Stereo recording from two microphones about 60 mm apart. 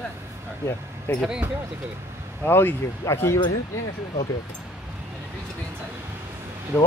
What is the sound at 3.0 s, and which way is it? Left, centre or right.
Speech, left.